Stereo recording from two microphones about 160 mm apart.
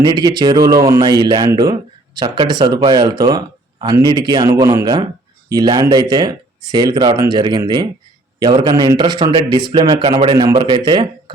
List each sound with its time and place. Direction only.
0.0 s speech: 25° right (ahead or behind)